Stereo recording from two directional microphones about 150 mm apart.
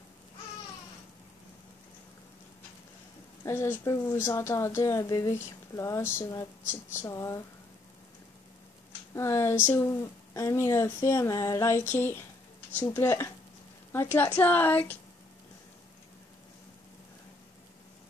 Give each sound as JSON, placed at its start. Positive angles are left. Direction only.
{"t": 3.4, "sound": "a woman's voice", "side_deg": 15}
{"t": 9.1, "sound": "a woman's voice", "side_deg": 15}